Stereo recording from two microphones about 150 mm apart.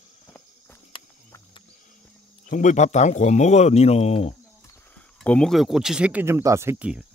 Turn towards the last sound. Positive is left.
turn(degrees=-15)  # may be behind; listen again after turning